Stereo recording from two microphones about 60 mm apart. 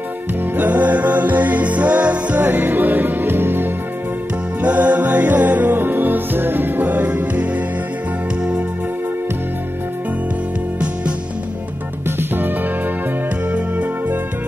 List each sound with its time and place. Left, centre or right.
0.6 s music: right
12.2 s music: right